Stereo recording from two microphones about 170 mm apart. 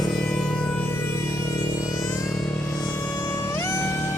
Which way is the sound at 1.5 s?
20° left (ahead or behind).